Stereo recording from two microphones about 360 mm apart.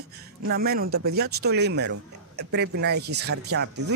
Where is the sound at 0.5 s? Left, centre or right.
Right.